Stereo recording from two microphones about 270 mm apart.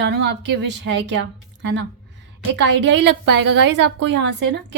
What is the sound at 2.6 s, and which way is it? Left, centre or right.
A woman's voice, right.